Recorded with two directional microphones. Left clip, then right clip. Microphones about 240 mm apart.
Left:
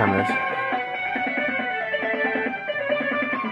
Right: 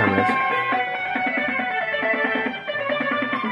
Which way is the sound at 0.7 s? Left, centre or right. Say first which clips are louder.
Right 3 dB; right.